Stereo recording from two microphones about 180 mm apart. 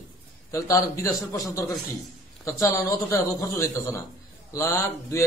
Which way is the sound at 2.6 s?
15° left (ahead or behind).